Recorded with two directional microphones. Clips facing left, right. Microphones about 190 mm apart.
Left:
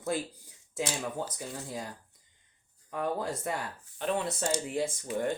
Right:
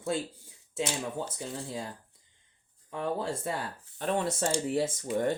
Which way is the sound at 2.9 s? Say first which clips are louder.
Even; 30° right (ahead or behind).